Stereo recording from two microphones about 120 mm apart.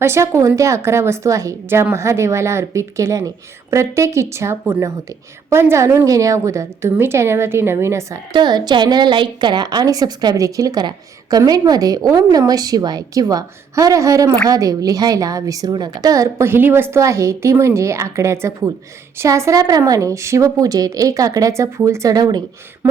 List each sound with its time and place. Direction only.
0.0 s a woman's voice: 20° right (ahead or behind)
8.3 s a woman's voice: 35° right (ahead or behind)